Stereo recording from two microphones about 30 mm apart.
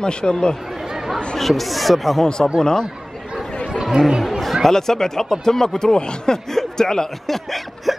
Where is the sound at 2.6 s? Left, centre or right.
Left.